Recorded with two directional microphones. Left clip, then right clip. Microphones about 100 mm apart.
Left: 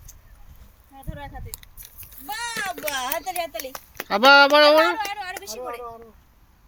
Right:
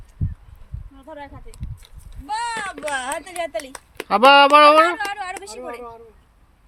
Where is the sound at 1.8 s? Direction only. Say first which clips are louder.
Even; 10° left (ahead or behind).